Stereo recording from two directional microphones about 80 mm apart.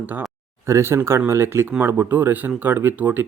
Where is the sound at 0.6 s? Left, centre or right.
Right.